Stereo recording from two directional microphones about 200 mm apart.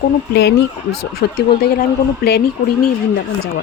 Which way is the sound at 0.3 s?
55° left (ahead or behind).